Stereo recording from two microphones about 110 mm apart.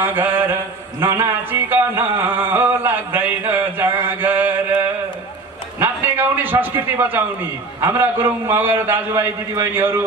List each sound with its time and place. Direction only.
0.0 s a man's voice: 20° right (ahead or behind)
1.0 s a sound: 20° right (ahead or behind)
7.8 s a man's voice: 20° right (ahead or behind)